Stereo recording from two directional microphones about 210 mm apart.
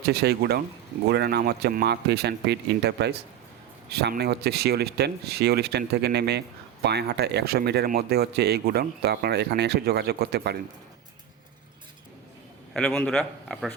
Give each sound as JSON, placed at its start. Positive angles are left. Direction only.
{"t": 0.0, "sound": "speech", "side_deg": -50}
{"t": 12.7, "sound": "a man's voice", "side_deg": 5}